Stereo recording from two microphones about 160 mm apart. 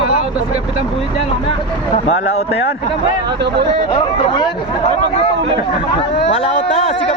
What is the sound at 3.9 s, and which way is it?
Speech, 30° left (ahead or behind).